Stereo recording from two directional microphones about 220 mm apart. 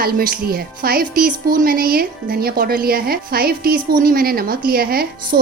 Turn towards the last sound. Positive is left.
turn(degrees=-40)  # may be behind; listen again after turning